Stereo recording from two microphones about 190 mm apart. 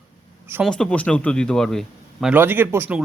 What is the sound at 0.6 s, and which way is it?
A man's voice, 5° left (ahead or behind).